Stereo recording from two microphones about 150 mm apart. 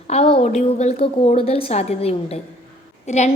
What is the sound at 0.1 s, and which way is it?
A woman's voice, 45° left (ahead or behind).